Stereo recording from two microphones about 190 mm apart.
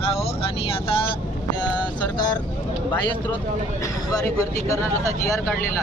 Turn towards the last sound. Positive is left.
turn(degrees=15)  # may be behind; listen again after turning